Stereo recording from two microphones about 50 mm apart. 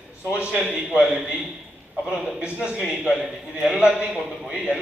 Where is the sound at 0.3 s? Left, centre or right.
Right.